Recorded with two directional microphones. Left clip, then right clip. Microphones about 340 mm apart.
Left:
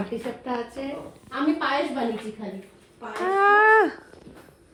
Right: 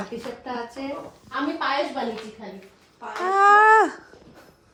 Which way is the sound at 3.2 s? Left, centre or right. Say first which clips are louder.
Right 3 dB; centre.